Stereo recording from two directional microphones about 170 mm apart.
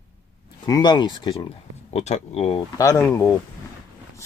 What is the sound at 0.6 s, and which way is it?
Speech, 25° left (ahead or behind).